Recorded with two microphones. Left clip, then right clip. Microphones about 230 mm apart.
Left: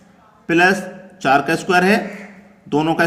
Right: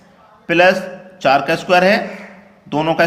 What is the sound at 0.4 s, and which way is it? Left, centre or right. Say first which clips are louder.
Speech: right 3 dB; centre.